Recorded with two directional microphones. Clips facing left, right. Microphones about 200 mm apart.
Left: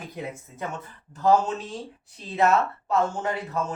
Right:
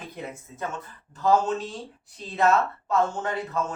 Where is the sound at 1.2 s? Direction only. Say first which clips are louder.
Left 1 dB; 10° left (ahead or behind).